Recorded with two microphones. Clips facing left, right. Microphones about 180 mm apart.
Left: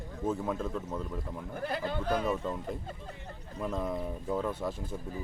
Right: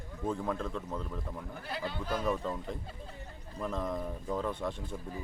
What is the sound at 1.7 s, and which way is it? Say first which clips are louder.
Speech: left 4 dB; 50° left (ahead or behind).